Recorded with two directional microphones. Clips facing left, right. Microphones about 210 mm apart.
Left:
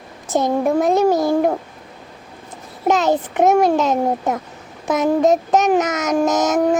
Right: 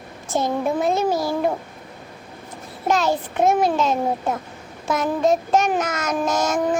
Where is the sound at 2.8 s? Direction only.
20° left (ahead or behind).